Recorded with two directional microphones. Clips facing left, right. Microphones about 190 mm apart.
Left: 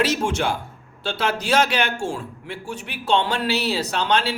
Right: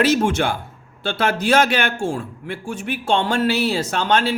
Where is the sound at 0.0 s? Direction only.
55° right (ahead or behind).